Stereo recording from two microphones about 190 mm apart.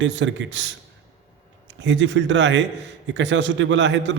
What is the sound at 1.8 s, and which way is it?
A man's voice, 70° right (ahead or behind).